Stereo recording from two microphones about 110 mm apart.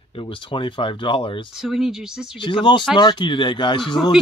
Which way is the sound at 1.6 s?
5° right (ahead or behind).